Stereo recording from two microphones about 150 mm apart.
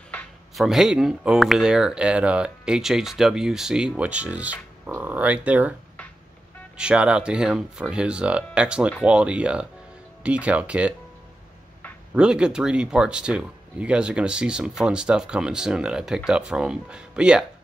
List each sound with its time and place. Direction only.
0.1 s speech: 5° left (ahead or behind)
6.8 s speech: 5° right (ahead or behind)
12.2 s speech: 5° right (ahead or behind)